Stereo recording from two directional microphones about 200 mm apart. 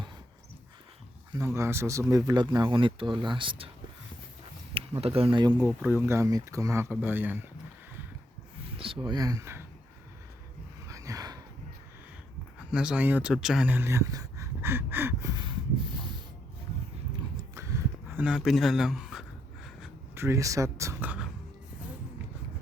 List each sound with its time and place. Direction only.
1.3 s speech: 15° right (ahead or behind)
4.7 s speech: 30° right (ahead or behind); by 7.3 s 10° right (ahead or behind)
8.8 s speech: 25° right (ahead or behind)
10.8 s a sound: 15° right (ahead or behind)
12.7 s speech: 5° right (ahead or behind); by 15.5 s 20° right (ahead or behind)
17.5 s a sound: 15° right (ahead or behind)
20.1 s speech: 15° right (ahead or behind)